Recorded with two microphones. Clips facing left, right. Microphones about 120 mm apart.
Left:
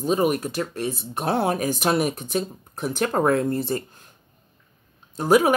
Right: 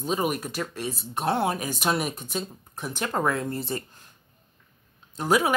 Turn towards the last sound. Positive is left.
turn(degrees=40)  # may be behind; listen again after turning